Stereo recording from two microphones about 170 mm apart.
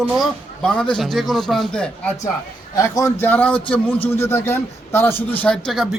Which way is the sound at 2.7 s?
20° left (ahead or behind).